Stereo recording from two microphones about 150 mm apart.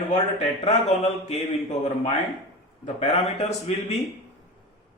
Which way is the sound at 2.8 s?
50° left (ahead or behind).